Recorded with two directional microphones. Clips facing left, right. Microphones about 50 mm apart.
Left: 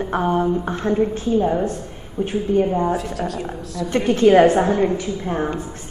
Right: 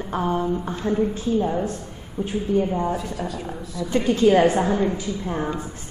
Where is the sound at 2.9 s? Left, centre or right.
Left.